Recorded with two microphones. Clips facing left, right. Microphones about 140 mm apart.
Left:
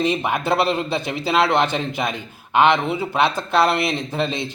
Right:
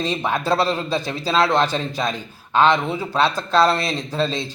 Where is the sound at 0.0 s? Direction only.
15° left (ahead or behind).